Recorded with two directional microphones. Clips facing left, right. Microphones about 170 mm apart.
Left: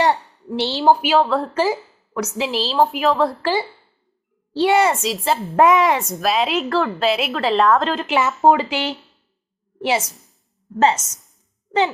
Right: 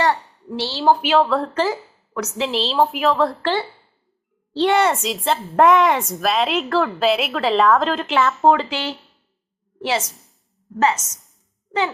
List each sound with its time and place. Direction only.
0.0 s a sound: 20° left (ahead or behind)
1.0 s a woman's voice: centre (ahead or behind)
8.7 s speech: 15° left (ahead or behind)
10.8 s a woman's voice: 25° left (ahead or behind)